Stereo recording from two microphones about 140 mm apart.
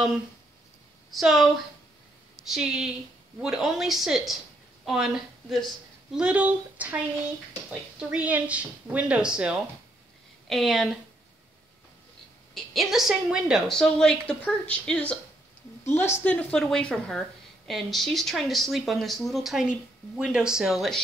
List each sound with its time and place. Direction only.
1.1 s a woman's voice: centre (ahead or behind)
2.5 s a woman's voice: 5° right (ahead or behind)
8.0 s a woman's voice: 10° right (ahead or behind)
12.7 s a woman's voice: 5° right (ahead or behind)